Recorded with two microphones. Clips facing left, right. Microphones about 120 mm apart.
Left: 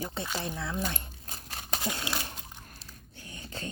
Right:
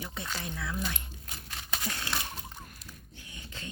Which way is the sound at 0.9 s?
35° left (ahead or behind).